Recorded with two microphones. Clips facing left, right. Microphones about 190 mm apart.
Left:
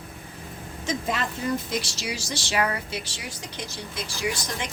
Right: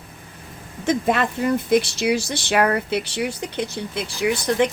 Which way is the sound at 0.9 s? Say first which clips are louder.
Right 8 dB; 60° right (ahead or behind).